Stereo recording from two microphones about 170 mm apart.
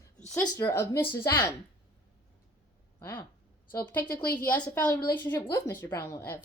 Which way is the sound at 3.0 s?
15° left (ahead or behind).